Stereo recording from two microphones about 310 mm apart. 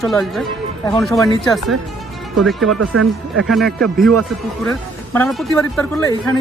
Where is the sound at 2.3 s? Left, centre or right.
Centre.